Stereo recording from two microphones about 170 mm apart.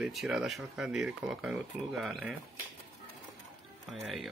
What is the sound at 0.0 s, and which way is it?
Speech, centre (ahead or behind).